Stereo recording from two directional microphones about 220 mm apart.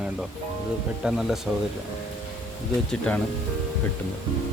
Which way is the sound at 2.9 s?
5° left (ahead or behind).